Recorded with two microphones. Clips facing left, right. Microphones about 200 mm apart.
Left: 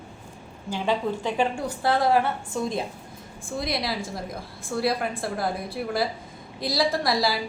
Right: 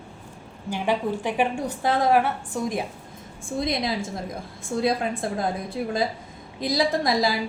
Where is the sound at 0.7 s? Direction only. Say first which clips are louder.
Right 1 dB; 15° right (ahead or behind).